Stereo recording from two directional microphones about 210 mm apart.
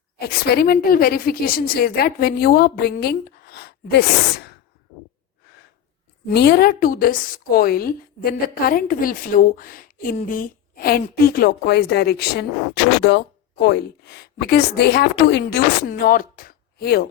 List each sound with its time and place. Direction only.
0.2 s a woman's voice: 45° left (ahead or behind)
6.2 s a woman's voice: 50° left (ahead or behind)